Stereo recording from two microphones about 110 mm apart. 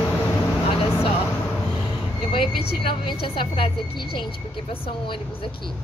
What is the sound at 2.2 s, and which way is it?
Speech, 50° left (ahead or behind).